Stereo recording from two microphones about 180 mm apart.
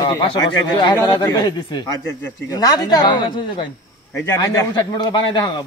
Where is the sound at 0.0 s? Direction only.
25° left (ahead or behind).